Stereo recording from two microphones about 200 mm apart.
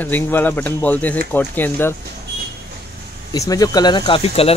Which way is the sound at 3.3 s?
15° left (ahead or behind).